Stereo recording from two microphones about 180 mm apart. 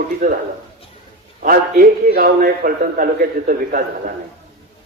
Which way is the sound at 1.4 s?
50° right (ahead or behind).